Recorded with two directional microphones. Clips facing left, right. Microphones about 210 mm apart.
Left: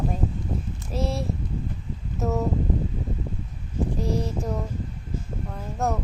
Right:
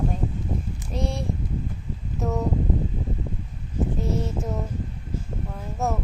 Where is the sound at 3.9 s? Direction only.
Centre (ahead or behind).